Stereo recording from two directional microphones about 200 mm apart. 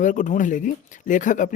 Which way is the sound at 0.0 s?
40° left (ahead or behind).